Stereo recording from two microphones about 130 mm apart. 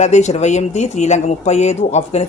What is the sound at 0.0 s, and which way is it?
A woman's voice, 65° left (ahead or behind).